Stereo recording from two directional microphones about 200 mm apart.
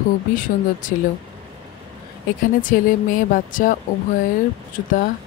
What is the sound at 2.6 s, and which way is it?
Speech, 40° left (ahead or behind).